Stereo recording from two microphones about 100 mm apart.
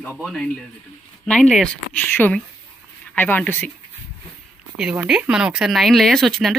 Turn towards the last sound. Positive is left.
turn(degrees=0)  # may be behind; listen again after turning